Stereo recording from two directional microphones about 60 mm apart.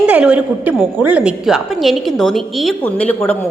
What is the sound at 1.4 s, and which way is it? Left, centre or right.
A woman's voice, centre.